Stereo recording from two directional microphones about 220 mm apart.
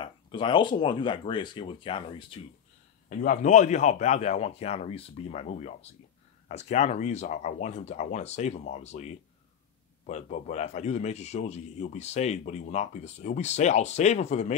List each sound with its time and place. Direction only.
0.0 s speech: 20° left (ahead or behind)
3.1 s a man's voice: 35° left (ahead or behind)